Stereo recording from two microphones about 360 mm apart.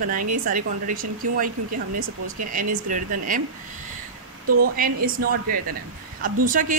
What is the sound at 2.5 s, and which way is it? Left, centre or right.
Speech, right.